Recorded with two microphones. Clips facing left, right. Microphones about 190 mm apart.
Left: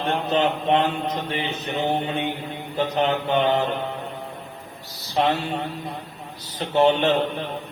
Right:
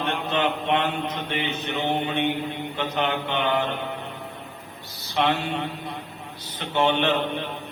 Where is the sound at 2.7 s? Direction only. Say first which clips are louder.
Left 5 dB; 40° left (ahead or behind).